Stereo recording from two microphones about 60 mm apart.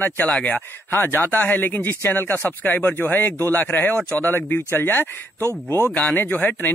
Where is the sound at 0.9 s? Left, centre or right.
Left.